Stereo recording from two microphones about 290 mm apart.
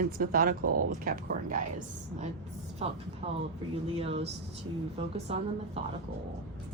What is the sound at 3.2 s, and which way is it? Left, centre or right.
A woman's voice, right.